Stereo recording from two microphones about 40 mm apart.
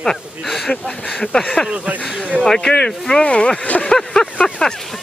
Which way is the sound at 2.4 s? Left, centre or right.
Centre.